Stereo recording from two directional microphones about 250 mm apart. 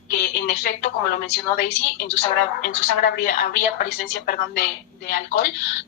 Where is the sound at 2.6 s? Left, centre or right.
Left.